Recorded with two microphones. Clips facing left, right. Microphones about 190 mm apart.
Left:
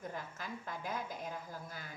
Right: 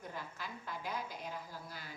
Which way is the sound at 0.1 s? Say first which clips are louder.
Left 2 dB; 45° left (ahead or behind).